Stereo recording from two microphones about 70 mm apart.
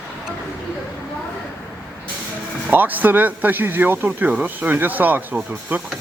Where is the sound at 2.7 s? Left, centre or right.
Right.